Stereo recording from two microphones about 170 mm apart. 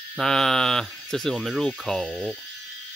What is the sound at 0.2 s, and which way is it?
Speech, 5° left (ahead or behind).